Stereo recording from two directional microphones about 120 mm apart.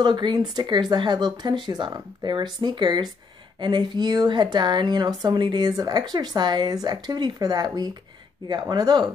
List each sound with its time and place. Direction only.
0.0 s speech: 40° right (ahead or behind)